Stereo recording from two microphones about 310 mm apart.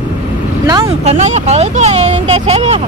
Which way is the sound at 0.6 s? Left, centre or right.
Centre.